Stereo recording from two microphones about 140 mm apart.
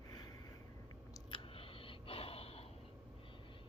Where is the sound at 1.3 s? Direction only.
40° left (ahead or behind).